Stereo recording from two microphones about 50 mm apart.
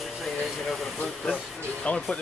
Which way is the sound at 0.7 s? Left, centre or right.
Centre.